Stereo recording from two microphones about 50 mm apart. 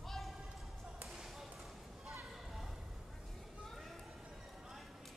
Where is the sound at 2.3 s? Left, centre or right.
Centre.